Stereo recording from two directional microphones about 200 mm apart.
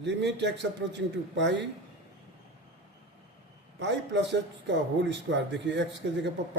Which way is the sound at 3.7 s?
60° right (ahead or behind).